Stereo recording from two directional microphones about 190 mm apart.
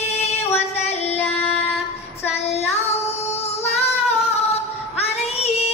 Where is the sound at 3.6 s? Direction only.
35° left (ahead or behind).